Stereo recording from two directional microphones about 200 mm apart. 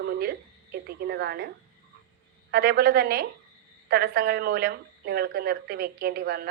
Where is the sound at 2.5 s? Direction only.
50° right (ahead or behind).